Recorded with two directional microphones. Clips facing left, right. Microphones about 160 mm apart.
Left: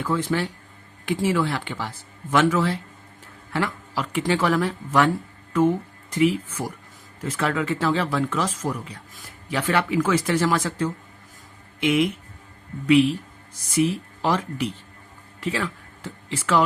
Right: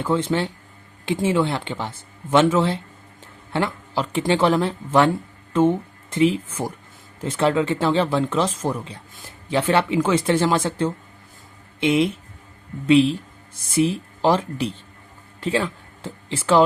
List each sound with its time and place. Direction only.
0.0 s speech: 25° right (ahead or behind)